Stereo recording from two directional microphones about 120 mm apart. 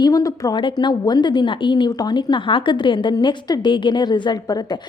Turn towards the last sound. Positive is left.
turn(degrees=35)  # may be behind; listen again after turning